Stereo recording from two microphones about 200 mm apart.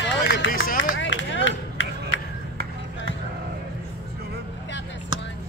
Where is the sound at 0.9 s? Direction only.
65° left (ahead or behind).